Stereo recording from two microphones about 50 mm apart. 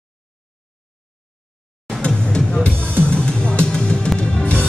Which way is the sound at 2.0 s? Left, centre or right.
Left.